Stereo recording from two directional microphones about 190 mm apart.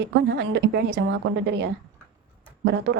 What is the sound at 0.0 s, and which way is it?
Speech, 65° right (ahead or behind).